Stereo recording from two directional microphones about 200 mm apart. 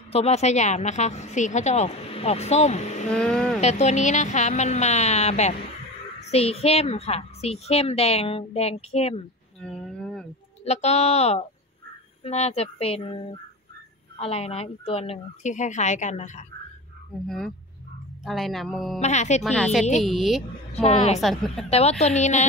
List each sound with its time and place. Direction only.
0.1 s a woman's voice: 30° left (ahead or behind)
3.2 s speech: 5° left (ahead or behind)
3.6 s a woman's voice: 35° left (ahead or behind)
9.6 s a sound: 5° left (ahead or behind)
10.6 s a woman's voice: 35° left (ahead or behind)
18.2 s speech: centre (ahead or behind)
18.9 s a woman's voice: 35° left (ahead or behind)
19.4 s speech: centre (ahead or behind)
20.7 s a woman's voice: 30° left (ahead or behind)
21.2 s speech: centre (ahead or behind)
21.6 s a woman's voice: 30° left (ahead or behind)